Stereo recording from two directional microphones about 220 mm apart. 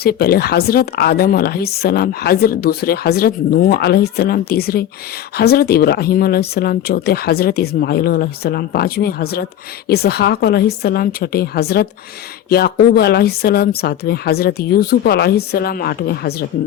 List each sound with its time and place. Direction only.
0.0 s speech: 45° left (ahead or behind)